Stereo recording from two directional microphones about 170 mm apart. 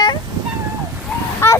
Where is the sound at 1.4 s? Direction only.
15° left (ahead or behind).